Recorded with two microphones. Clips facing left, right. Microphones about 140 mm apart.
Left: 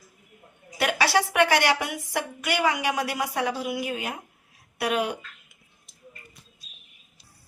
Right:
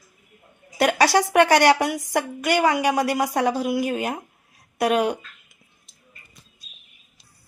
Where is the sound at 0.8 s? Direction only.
45° right (ahead or behind).